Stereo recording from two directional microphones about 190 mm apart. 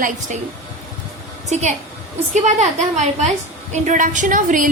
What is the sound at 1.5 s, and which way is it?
A woman's voice, 35° right (ahead or behind).